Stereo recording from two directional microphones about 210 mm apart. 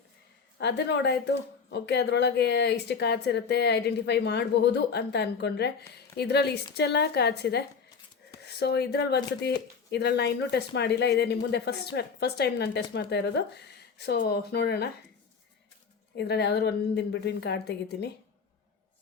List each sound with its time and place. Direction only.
0.6 s a woman's voice: 55° left (ahead or behind)
16.1 s speech: 50° left (ahead or behind)